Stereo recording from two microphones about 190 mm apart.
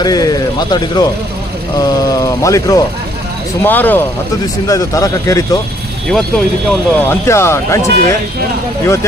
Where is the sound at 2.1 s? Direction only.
15° left (ahead or behind).